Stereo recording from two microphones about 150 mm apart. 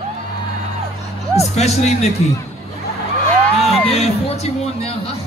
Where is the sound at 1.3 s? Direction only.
45° left (ahead or behind).